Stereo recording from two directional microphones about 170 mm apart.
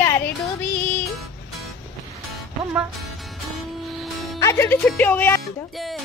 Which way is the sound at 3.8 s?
Centre (ahead or behind).